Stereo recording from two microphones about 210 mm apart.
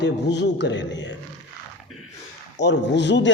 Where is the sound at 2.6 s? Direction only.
55° left (ahead or behind).